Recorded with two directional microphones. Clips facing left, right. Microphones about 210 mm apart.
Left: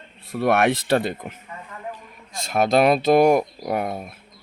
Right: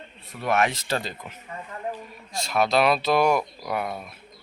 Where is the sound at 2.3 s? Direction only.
50° left (ahead or behind).